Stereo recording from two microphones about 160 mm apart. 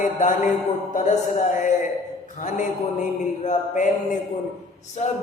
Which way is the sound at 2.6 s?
50° left (ahead or behind).